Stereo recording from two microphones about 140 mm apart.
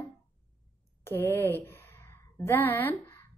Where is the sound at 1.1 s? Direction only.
15° left (ahead or behind).